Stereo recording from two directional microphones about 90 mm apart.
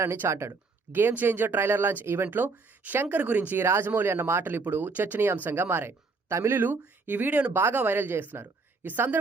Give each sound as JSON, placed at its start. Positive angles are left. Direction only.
{"t": 0.0, "sound": "speech", "side_deg": -30}